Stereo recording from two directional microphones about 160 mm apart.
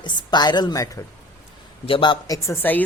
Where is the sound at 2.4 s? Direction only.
10° left (ahead or behind).